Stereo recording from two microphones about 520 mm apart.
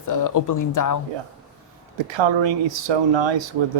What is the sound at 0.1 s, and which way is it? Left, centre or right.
Speech, left.